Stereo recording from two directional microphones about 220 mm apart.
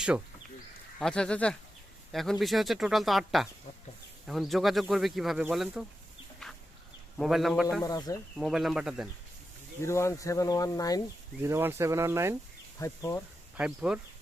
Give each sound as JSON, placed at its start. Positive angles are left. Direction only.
{"t": 0.9, "sound": "speech", "side_deg": 5}
{"t": 7.2, "sound": "speech", "side_deg": 0}
{"t": 7.8, "sound": "speech", "side_deg": 15}
{"t": 8.4, "sound": "speech", "side_deg": 0}
{"t": 9.8, "sound": "speech", "side_deg": 10}
{"t": 11.4, "sound": "speech", "side_deg": -10}
{"t": 12.8, "sound": "speech", "side_deg": 15}
{"t": 13.6, "sound": "speech", "side_deg": -5}